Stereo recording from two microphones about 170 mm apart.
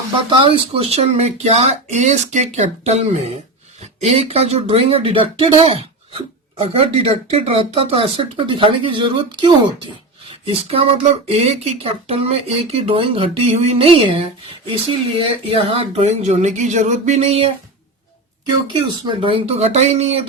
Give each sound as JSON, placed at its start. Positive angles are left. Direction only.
{"t": 0.3, "sound": "speech", "side_deg": -30}
{"t": 4.0, "sound": "speech", "side_deg": -40}
{"t": 18.7, "sound": "speech", "side_deg": -30}